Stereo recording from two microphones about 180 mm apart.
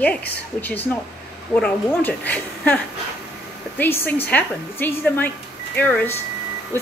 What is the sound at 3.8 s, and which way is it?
Speech, 10° left (ahead or behind).